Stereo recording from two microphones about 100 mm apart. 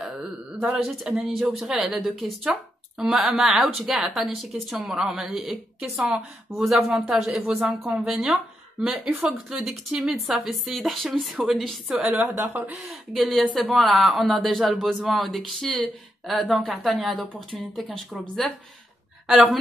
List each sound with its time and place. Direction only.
0.0 s a sound: 5° right (ahead or behind)
0.8 s a woman's voice: 5° right (ahead or behind)
12.0 s a woman's voice: 20° right (ahead or behind)
13.1 s a woman's voice: centre (ahead or behind)
19.2 s a woman's voice: centre (ahead or behind)